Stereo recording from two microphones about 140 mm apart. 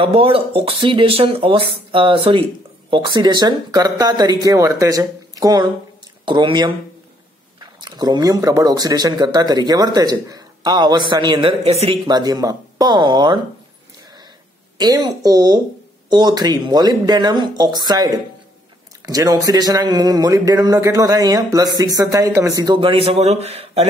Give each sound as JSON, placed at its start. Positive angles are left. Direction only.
{"t": 0.0, "sound": "speech", "side_deg": -40}
{"t": 7.8, "sound": "speech", "side_deg": -30}
{"t": 12.1, "sound": "speech", "side_deg": -30}
{"t": 14.8, "sound": "speech", "side_deg": -30}
{"t": 23.0, "sound": "speech", "side_deg": -50}